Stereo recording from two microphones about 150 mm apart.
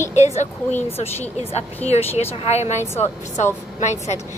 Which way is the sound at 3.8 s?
50° left (ahead or behind).